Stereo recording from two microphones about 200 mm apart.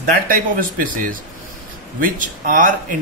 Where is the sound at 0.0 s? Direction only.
45° right (ahead or behind).